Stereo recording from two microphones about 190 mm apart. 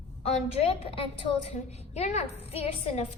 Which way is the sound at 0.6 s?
30° left (ahead or behind).